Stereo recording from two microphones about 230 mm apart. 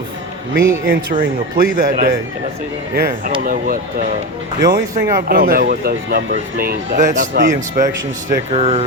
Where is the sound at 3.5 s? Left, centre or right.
Right.